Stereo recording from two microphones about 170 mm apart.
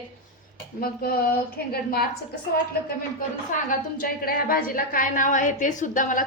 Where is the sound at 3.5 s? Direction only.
50° left (ahead or behind).